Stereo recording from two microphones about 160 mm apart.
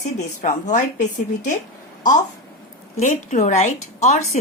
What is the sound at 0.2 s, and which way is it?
Speech, 50° left (ahead or behind).